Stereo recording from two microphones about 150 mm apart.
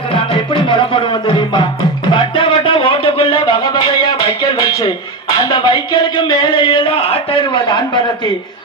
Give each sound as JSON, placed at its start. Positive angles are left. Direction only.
{"t": 0.1, "sound": "music", "side_deg": 35}